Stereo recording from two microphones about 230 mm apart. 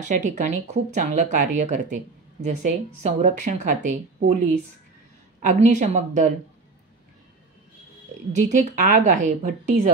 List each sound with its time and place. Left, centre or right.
0.0 s speech: right
5.4 s speech: right
8.3 s speech: right